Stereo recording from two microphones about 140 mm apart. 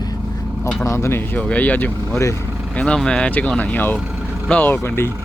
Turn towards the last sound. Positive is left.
turn(degrees=15)  # may be behind; listen again after turning